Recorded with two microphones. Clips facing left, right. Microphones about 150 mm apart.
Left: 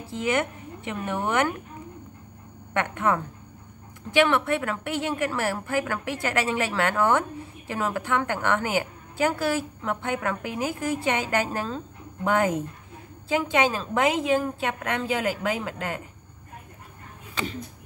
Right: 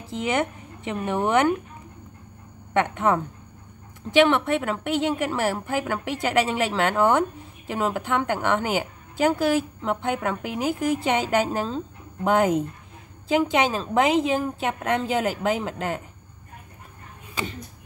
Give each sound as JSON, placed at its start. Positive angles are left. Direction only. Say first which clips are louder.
{"t": 0.1, "sound": "speech", "louder": "right 1 dB", "side_deg": -20}
{"t": 2.7, "sound": "a woman's voice", "louder": "right 3 dB", "side_deg": -20}